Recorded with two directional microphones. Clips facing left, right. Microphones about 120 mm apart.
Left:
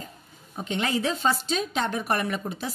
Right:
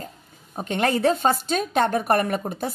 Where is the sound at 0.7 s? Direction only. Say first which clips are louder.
Right 6 dB; 55° right (ahead or behind).